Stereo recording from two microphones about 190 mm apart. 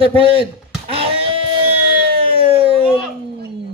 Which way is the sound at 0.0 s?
30° right (ahead or behind).